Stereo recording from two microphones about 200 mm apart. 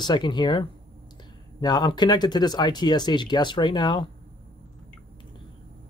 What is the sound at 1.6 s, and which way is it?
Speech, 20° left (ahead or behind).